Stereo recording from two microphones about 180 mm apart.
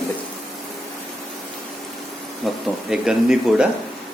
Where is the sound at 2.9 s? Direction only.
5° right (ahead or behind).